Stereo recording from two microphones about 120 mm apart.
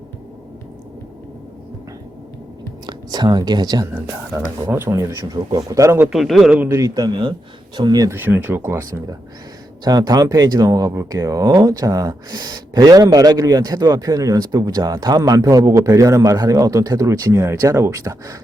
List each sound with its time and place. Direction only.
2.8 s speech: 35° right (ahead or behind)
3.9 s speech: 10° right (ahead or behind)
4.6 s speech: 20° right (ahead or behind)
6.1 s a man's voice: centre (ahead or behind)
6.6 s speech: 20° right (ahead or behind)
8.1 s speech: 15° right (ahead or behind)
9.8 s speech: 35° right (ahead or behind)